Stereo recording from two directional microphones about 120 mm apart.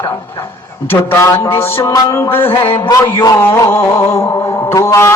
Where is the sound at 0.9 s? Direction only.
20° left (ahead or behind).